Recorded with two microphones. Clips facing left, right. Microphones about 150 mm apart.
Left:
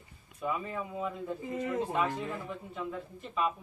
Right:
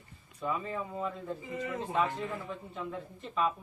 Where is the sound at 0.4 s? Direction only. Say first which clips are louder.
Even; 10° left (ahead or behind).